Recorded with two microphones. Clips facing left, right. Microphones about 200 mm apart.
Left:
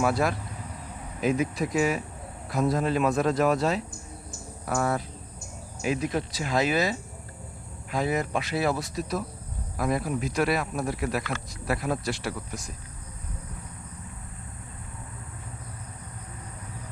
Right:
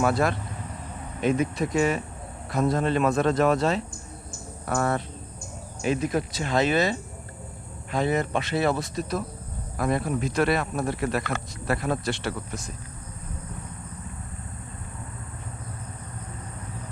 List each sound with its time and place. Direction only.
0.0 s speech: centre (ahead or behind)
4.3 s a sound: centre (ahead or behind)
5.8 s speech: centre (ahead or behind)